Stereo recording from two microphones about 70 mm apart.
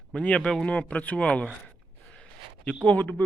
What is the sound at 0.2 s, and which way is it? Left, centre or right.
Speech, centre.